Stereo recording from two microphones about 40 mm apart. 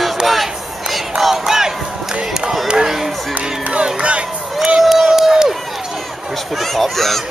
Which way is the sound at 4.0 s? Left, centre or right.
Right.